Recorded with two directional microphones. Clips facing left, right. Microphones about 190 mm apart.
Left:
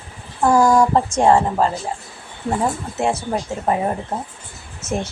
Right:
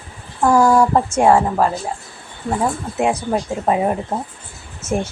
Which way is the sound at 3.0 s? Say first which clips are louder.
Right 2 dB; 15° right (ahead or behind).